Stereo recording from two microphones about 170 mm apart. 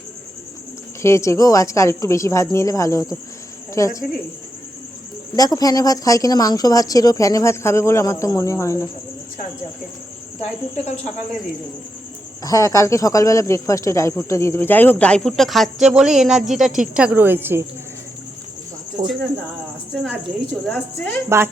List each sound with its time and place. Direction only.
1.0 s speech: 15° left (ahead or behind)
5.4 s speech: 20° left (ahead or behind)
10.4 s a woman's voice: 45° left (ahead or behind)
12.4 s speech: 20° left (ahead or behind); by 17.7 s 15° right (ahead or behind)
20.7 s speech: 5° left (ahead or behind)
21.2 s speech: 15° right (ahead or behind)